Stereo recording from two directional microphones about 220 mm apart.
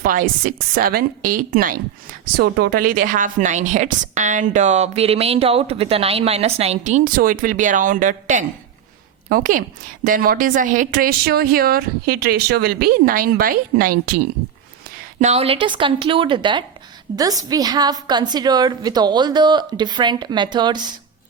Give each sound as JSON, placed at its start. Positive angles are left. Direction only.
{"t": 0.0, "sound": "a woman's voice", "side_deg": -40}
{"t": 15.2, "sound": "a woman's voice", "side_deg": -30}